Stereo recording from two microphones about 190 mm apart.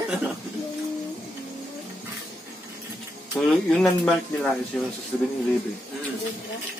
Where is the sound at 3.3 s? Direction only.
5° left (ahead or behind).